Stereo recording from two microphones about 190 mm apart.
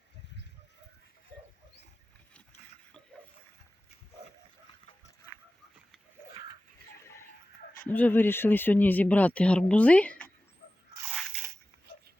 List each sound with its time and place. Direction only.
1.3 s pig: 60° right (ahead or behind)
7.8 s speech: 10° left (ahead or behind)
11.1 s biting: 5° right (ahead or behind)